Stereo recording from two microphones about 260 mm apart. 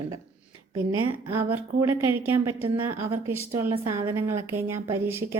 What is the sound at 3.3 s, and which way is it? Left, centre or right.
A woman's voice, centre.